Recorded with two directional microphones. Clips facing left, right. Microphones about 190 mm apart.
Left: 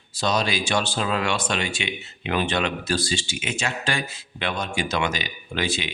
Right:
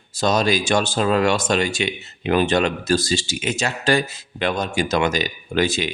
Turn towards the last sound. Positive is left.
turn(degrees=-45)  # may be behind; listen again after turning